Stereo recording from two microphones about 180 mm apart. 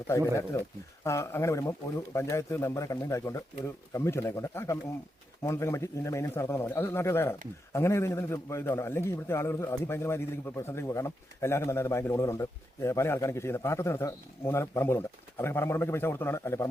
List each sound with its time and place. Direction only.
0.5 s a man's voice: 20° left (ahead or behind)